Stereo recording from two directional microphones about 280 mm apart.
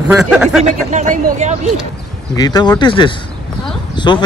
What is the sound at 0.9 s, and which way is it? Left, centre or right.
Speech, right.